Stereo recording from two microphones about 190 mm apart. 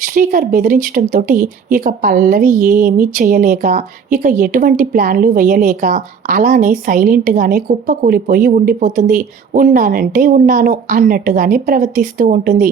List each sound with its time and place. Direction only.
0.0 s speech: 45° right (ahead or behind)